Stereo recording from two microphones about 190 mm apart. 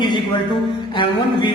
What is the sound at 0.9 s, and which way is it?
Speech, 25° left (ahead or behind).